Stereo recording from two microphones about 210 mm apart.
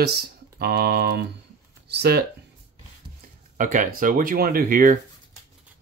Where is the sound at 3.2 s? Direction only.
40° right (ahead or behind).